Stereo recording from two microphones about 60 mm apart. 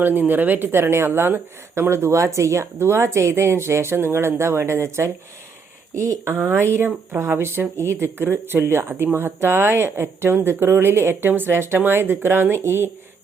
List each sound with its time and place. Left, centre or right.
0.0 s a woman's voice: right